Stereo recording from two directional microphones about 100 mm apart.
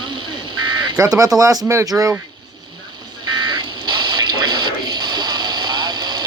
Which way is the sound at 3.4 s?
50° right (ahead or behind).